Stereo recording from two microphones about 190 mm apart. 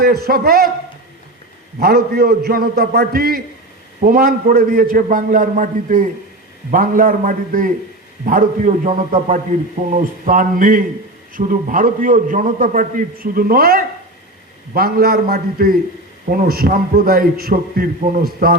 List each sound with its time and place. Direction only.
0.0 s a man's voice: 55° right (ahead or behind)
1.8 s a man's voice: 55° right (ahead or behind)